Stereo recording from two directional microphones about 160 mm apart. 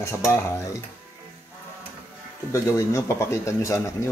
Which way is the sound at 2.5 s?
20° left (ahead or behind).